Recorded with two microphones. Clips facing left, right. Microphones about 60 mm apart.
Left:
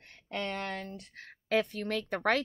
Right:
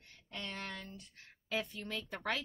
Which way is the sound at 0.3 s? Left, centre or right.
Left.